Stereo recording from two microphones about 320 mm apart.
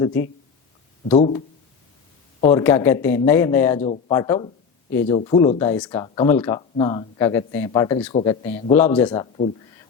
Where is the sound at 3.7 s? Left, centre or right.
Centre.